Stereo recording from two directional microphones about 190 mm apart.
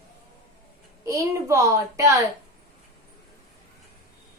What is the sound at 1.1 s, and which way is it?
A child's voice, 15° right (ahead or behind).